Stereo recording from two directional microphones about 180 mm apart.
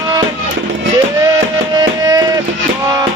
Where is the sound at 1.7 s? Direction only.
20° right (ahead or behind).